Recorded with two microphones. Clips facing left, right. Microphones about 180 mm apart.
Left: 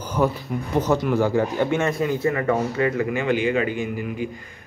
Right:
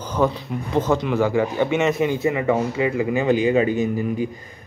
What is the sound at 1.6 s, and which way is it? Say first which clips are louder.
A man's voice: right 2 dB; 20° right (ahead or behind).